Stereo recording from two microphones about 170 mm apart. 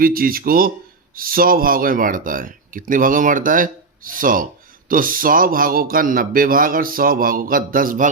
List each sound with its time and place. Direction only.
0.0 s a man's voice: 60° right (ahead or behind)